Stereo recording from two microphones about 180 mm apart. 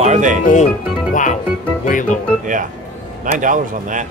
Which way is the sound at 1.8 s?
45° left (ahead or behind).